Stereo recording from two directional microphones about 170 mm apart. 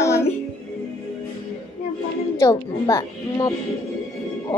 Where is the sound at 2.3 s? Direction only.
20° left (ahead or behind).